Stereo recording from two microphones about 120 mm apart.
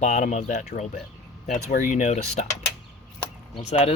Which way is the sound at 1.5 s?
85° left.